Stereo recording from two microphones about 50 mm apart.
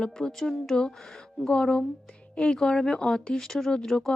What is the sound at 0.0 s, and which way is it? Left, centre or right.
A woman's voice, centre.